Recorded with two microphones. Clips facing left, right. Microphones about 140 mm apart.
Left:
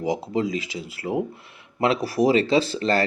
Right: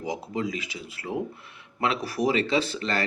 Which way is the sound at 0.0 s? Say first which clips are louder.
Left 6 dB; 30° left (ahead or behind).